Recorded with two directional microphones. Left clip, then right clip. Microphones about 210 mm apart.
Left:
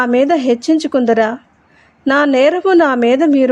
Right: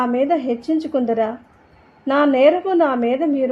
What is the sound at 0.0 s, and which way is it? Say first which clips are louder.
A woman's voice: left 6 dB; 25° left (ahead or behind).